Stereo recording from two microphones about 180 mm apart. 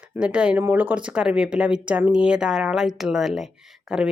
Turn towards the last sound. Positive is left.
turn(degrees=-5)  # may be behind; listen again after turning